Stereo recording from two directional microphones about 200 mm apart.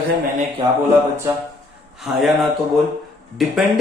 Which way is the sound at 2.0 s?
Centre (ahead or behind).